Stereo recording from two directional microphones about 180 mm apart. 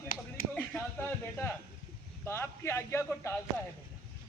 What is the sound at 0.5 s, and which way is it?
A man's voice, 10° left (ahead or behind).